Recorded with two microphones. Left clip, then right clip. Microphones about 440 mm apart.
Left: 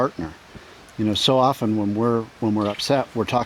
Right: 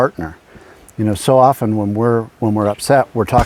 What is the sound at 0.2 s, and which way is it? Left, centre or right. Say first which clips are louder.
Speech: right 5 dB; right.